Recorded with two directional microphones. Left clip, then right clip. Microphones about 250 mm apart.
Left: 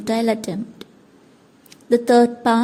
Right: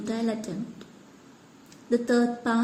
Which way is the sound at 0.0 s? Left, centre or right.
Left.